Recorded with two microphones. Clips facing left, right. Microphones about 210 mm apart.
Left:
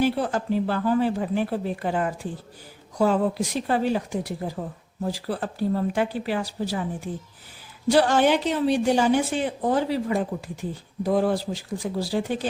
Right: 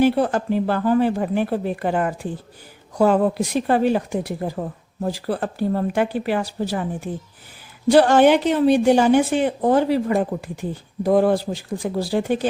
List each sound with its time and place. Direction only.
0.0 s a woman's voice: 55° right (ahead or behind)